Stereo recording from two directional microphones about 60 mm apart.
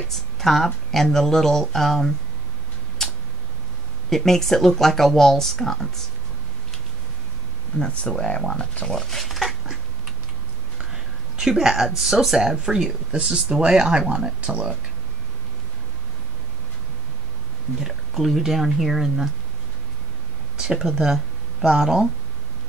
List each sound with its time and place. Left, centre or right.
0.1 s speech: centre
3.0 s tick-tock: centre
4.1 s speech: centre
7.8 s speech: centre
8.9 s dog: centre
10.9 s a sound: centre
12.0 s speech: centre
17.7 s speech: centre
20.5 s speech: centre